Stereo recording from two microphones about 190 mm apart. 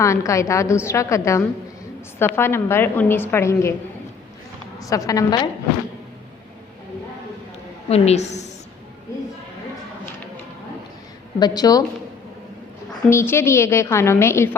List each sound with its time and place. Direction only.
0.0 s a woman's voice: 15° left (ahead or behind)
4.8 s a woman's voice: 15° left (ahead or behind)
7.9 s a woman's voice: 35° left (ahead or behind)
11.3 s a woman's voice: 20° left (ahead or behind)
13.1 s a woman's voice: 15° left (ahead or behind)